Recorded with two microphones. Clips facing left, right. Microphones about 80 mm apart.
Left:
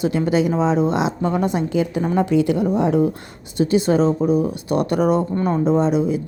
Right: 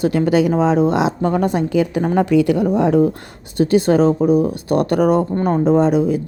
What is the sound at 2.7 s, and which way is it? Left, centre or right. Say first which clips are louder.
Speech: right 3 dB; right.